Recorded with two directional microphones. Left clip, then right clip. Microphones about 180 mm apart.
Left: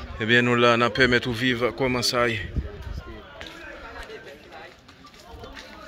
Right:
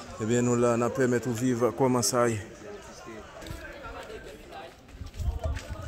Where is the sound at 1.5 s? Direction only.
10° right (ahead or behind).